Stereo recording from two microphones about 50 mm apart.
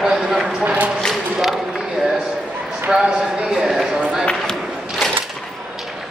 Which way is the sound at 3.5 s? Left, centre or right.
Centre.